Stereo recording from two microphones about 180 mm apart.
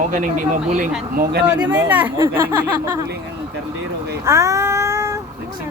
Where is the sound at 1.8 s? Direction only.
10° right (ahead or behind).